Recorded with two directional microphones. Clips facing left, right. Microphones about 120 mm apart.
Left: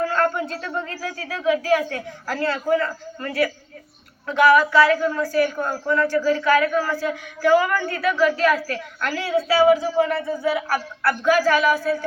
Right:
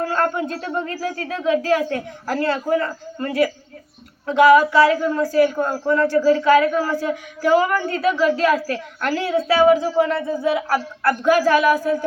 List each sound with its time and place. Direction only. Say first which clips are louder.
0.1 s a man's voice: right 1 dB; 20° right (ahead or behind)